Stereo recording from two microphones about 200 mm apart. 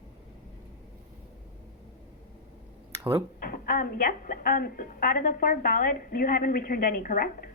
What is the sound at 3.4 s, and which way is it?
A woman's voice, 45° left (ahead or behind).